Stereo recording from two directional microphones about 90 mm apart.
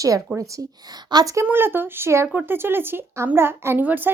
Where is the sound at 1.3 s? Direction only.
30° right (ahead or behind).